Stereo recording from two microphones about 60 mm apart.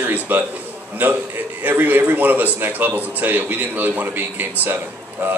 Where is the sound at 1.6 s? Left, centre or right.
Right.